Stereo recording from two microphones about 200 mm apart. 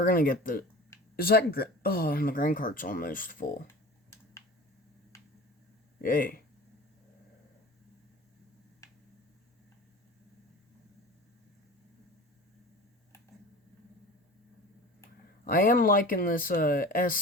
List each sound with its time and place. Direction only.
0.0 s speech: 45° left (ahead or behind)
6.0 s speech: 45° left (ahead or behind)
8.8 s a sound: 15° left (ahead or behind)
15.4 s speech: 45° left (ahead or behind)